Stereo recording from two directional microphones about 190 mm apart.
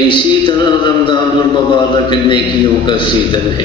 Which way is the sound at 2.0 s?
25° left (ahead or behind).